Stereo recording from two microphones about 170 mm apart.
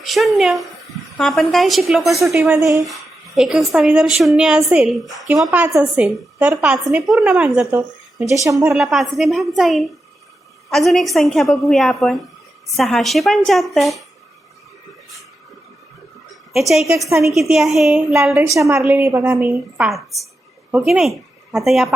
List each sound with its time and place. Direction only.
0.0 s a woman's voice: centre (ahead or behind)
2.6 s a woman's voice: 15° right (ahead or behind)
2.8 s a woman's voice: centre (ahead or behind)
8.3 s speech: 20° right (ahead or behind)
8.6 s a woman's voice: 5° right (ahead or behind)
16.5 s a woman's voice: centre (ahead or behind)
18.1 s a woman's voice: 15° right (ahead or behind)